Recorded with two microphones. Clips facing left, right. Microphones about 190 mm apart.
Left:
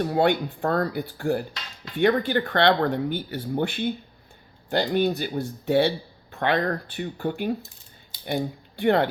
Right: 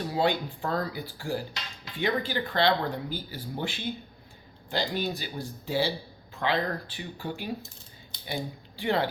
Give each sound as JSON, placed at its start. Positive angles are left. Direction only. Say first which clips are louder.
{"t": 0.0, "sound": "speech", "louder": "left 5 dB", "side_deg": 60}